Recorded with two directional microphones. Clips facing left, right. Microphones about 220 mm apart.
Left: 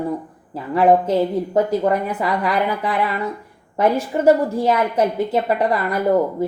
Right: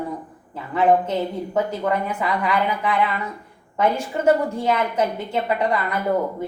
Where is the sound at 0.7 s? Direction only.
35° left (ahead or behind).